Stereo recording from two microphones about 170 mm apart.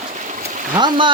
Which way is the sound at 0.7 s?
25° right (ahead or behind).